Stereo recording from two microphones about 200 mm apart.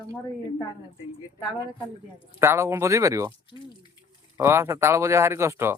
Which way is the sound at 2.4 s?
15° right (ahead or behind).